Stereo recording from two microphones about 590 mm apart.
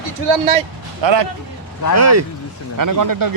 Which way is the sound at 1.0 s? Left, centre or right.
Right.